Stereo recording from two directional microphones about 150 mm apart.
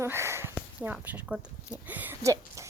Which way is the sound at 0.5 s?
5° right (ahead or behind).